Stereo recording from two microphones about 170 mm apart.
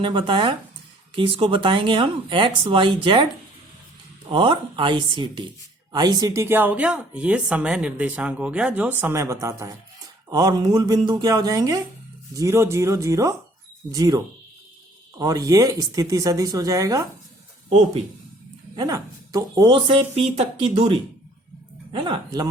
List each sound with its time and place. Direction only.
0.0 s speech: 30° right (ahead or behind)
4.3 s speech: 30° right (ahead or behind)
15.2 s speech: 20° right (ahead or behind)
17.7 s speech: 40° right (ahead or behind)
18.8 s speech: 20° right (ahead or behind); by 21.0 s 40° right (ahead or behind)
21.9 s speech: 25° right (ahead or behind)